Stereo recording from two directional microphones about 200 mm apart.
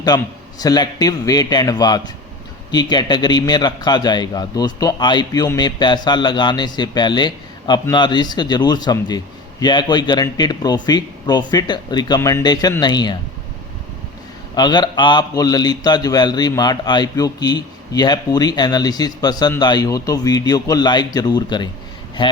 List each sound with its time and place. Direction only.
0.1 s a man's voice: 20° left (ahead or behind)
14.5 s a man's voice: 20° left (ahead or behind)